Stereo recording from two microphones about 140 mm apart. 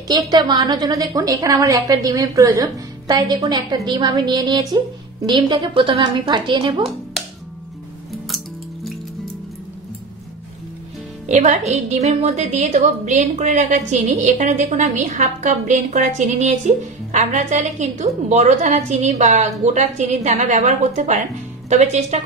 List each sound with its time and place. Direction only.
0.3 s a woman's voice: 30° right (ahead or behind)
11.2 s a woman's voice: 60° right (ahead or behind)